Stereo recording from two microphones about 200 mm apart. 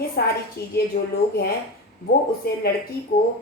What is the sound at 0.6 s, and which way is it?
Speech, 50° left (ahead or behind).